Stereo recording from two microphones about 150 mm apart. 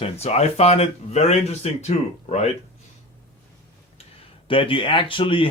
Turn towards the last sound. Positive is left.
turn(degrees=35)  # may be behind; listen again after turning